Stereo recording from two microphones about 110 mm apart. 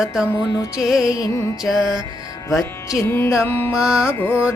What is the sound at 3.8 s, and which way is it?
Music, 10° right (ahead or behind).